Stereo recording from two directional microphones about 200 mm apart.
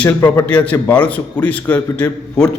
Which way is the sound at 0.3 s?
5° left (ahead or behind).